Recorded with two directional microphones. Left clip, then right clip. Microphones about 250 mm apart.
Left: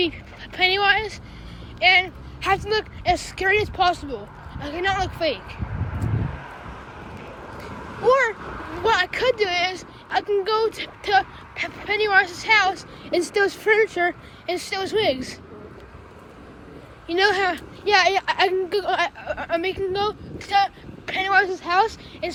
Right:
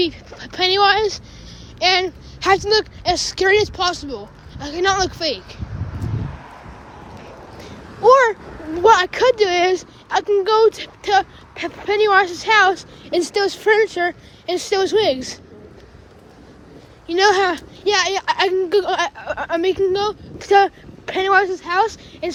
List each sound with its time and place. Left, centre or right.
0.0 s speech: centre
5.9 s a sound: left
8.0 s speech: centre
17.1 s speech: centre